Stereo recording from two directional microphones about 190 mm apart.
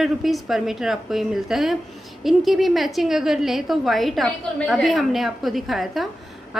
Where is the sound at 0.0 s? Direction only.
Centre (ahead or behind).